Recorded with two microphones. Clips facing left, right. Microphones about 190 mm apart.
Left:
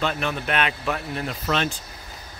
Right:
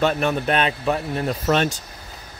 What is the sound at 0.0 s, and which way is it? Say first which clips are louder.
Speech: right 6 dB; 45° right (ahead or behind).